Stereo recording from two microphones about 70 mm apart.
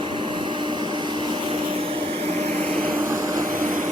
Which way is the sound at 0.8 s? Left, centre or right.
Right.